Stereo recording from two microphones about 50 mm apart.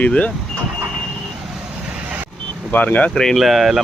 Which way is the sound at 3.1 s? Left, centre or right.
Centre.